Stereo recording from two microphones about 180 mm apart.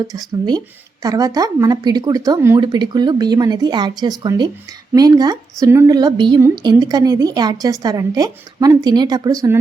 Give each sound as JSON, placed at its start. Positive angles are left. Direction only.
{"t": 1.0, "sound": "a woman's voice", "side_deg": -20}